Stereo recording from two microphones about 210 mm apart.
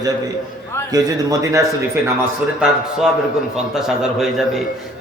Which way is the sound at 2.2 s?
5° right (ahead or behind).